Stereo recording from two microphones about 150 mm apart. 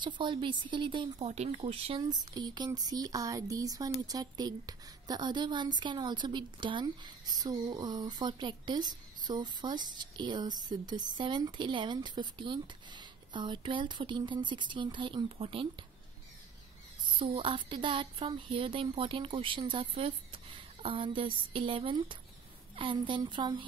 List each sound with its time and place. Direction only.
0.0 s speech: 35° right (ahead or behind)
1.3 s a woman's voice: 45° right (ahead or behind)
17.2 s speech: 35° right (ahead or behind)